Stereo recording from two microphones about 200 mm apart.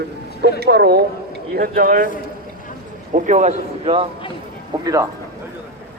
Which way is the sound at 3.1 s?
35° right (ahead or behind).